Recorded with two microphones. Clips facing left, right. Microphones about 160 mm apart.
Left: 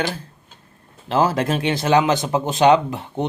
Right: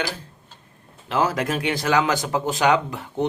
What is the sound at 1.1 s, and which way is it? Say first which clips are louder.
Speech: left 4 dB; 30° left (ahead or behind).